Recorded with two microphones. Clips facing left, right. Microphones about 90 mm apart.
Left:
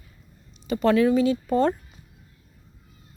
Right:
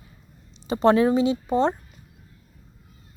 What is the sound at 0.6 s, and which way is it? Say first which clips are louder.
Speech: right 1 dB; 30° right (ahead or behind).